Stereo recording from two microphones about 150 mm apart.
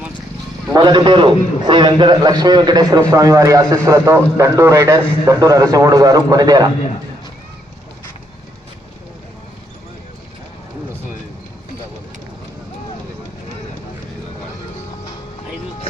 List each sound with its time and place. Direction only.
0.7 s a man's voice: 30° right (ahead or behind)